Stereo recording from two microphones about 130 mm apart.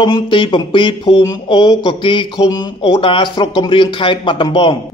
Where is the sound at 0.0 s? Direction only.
40° left (ahead or behind).